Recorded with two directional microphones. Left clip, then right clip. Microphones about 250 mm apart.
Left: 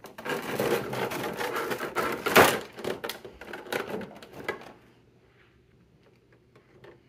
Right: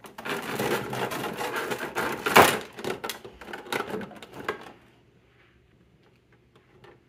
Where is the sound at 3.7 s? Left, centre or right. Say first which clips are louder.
Right 2 dB; centre.